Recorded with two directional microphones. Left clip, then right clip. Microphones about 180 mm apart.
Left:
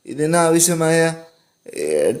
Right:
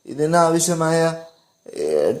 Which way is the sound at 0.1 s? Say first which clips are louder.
Even; 15° left (ahead or behind).